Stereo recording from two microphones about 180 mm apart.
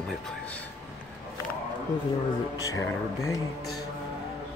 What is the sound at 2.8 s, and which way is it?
Speech, 15° left (ahead or behind).